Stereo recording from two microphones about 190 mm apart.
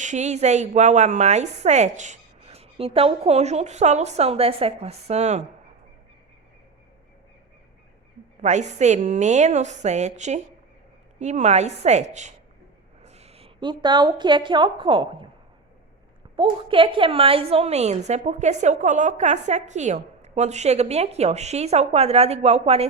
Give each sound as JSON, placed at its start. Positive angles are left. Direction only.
{"t": 0.0, "sound": "a woman's voice", "side_deg": -40}
{"t": 8.4, "sound": "a woman's voice", "side_deg": -40}
{"t": 16.3, "sound": "a woman's voice", "side_deg": -25}